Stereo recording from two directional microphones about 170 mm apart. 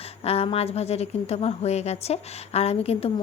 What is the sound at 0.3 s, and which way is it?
A woman's voice, 35° left (ahead or behind).